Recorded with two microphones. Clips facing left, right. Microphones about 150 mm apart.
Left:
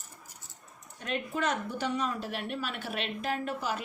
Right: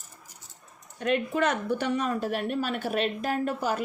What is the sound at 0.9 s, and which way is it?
Speech, 65° right (ahead or behind).